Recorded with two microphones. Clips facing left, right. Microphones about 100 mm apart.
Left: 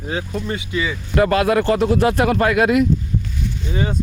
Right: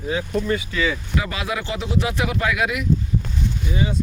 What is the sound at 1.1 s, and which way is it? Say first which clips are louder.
Speech: left 10 dB; 55° left (ahead or behind).